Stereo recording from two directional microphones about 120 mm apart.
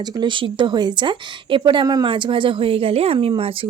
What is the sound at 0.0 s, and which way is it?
A woman's voice, 40° right (ahead or behind).